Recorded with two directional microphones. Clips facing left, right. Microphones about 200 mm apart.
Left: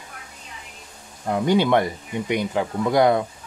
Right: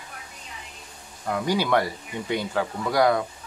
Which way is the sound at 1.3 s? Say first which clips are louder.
Left 5 dB; 25° left (ahead or behind).